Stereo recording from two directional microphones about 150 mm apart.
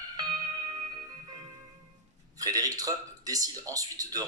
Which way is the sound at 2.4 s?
25° right (ahead or behind).